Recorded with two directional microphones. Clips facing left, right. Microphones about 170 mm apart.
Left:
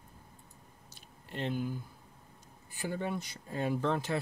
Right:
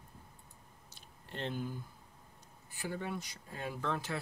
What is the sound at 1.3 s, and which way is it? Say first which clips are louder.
Speech: left 4 dB; 10° left (ahead or behind).